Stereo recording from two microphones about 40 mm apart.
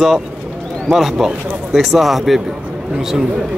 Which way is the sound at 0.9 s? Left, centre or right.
Centre.